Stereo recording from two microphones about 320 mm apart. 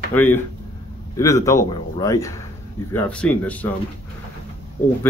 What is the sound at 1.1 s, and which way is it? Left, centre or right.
Speech, centre.